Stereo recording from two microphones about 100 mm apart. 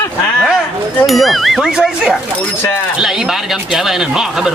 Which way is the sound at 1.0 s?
Centre (ahead or behind).